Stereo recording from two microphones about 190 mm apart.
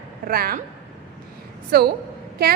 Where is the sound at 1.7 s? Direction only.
55° right (ahead or behind).